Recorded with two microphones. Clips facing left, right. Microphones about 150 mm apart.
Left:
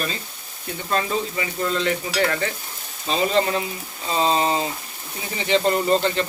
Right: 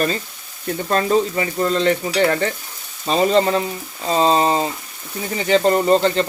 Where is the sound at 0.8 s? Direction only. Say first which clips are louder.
Right 6 dB; 45° right (ahead or behind).